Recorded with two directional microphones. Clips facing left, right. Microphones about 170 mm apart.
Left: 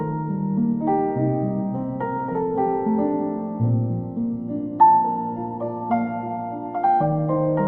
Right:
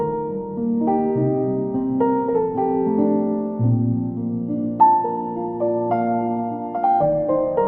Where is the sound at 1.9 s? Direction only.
10° right (ahead or behind).